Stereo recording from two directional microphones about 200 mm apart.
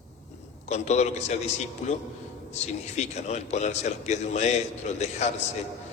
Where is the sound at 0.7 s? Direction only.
35° left (ahead or behind).